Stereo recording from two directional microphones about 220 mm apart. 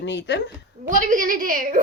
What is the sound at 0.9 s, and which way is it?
Speech, 35° right (ahead or behind).